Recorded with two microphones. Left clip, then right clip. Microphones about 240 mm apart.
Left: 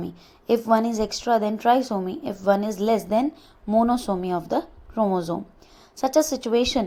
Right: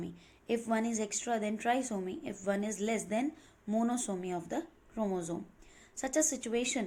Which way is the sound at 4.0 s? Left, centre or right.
Left.